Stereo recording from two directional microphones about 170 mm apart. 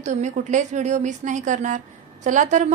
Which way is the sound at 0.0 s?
45° right (ahead or behind).